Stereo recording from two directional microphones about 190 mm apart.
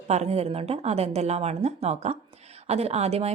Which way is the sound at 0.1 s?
35° right (ahead or behind).